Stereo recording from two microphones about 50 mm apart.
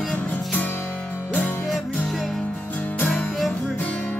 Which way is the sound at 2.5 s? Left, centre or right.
Left.